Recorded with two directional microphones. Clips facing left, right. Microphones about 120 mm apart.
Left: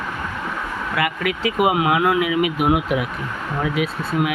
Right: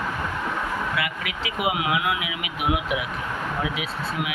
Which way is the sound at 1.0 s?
45° left (ahead or behind).